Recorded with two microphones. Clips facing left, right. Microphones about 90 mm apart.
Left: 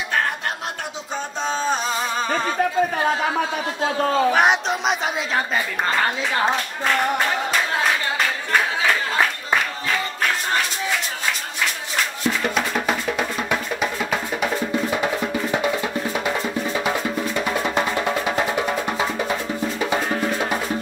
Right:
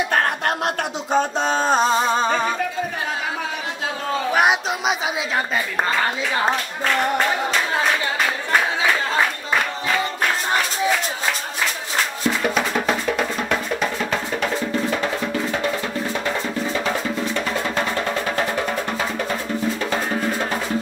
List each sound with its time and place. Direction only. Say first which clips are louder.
1.1 s a sound: right 6 dB; 60° right (ahead or behind)
1.9 s music: right 5 dB; 30° right (ahead or behind)
4.3 s speech: left 1 dB; 5° right (ahead or behind)
12.5 s music: right 1 dB; centre (ahead or behind)
16.3 s music: even; 10° left (ahead or behind)